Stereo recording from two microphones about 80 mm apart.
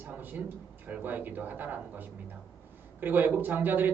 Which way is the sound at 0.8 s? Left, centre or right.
Right.